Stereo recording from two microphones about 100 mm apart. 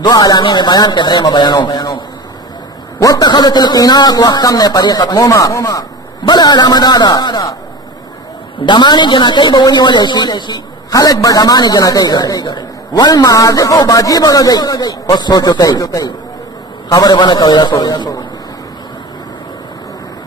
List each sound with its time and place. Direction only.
0.0 s a man's voice: 40° left (ahead or behind)
3.0 s a man's voice: 40° left (ahead or behind)
8.6 s a man's voice: 50° left (ahead or behind)